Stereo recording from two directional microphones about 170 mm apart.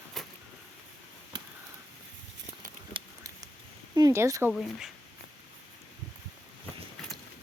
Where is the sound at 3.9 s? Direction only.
20° right (ahead or behind).